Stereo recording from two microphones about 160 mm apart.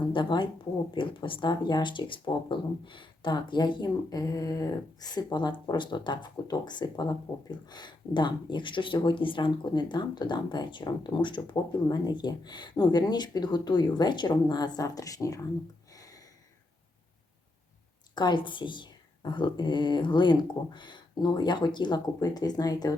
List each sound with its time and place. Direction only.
0.1 s speech: 30° left (ahead or behind)
15.9 s a sound: 20° left (ahead or behind)
18.1 s speech: 30° left (ahead or behind)